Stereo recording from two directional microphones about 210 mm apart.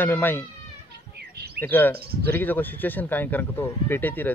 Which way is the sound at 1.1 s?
50° right (ahead or behind).